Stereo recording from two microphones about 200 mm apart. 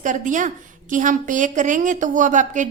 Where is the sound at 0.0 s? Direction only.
40° right (ahead or behind).